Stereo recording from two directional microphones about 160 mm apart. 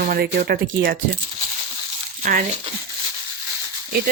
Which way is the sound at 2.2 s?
60° right (ahead or behind).